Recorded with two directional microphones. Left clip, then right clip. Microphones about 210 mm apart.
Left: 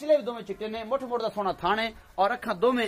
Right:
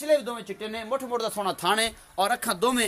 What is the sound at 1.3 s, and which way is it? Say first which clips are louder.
Speech: right 3 dB; 55° right (ahead or behind).